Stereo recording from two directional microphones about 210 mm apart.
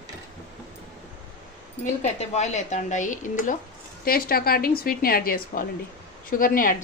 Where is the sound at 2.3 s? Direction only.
35° left (ahead or behind).